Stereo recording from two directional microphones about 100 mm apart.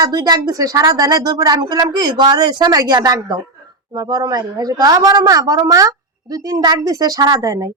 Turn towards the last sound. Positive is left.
turn(degrees=-35)  # may be behind; listen again after turning